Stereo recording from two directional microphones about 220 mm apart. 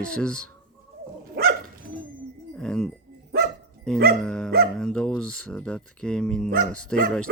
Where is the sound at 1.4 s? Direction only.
45° right (ahead or behind).